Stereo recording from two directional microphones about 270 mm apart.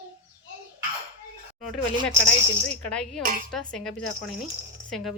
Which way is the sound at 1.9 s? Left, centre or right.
Centre.